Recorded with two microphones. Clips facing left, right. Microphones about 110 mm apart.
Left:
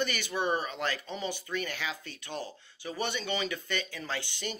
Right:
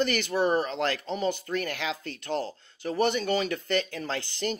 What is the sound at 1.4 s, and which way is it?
Speech, 55° right (ahead or behind).